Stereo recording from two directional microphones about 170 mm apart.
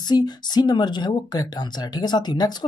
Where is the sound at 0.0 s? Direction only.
25° left (ahead or behind).